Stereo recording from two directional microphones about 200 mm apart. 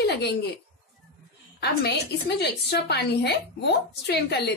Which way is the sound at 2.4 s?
55° left (ahead or behind).